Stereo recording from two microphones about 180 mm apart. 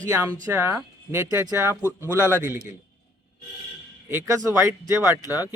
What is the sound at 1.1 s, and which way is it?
Speech, 15° right (ahead or behind).